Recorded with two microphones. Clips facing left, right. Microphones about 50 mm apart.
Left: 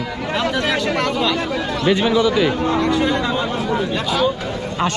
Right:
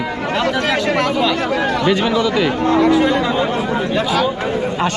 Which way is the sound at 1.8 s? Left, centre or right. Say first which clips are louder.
Left 3 dB; right.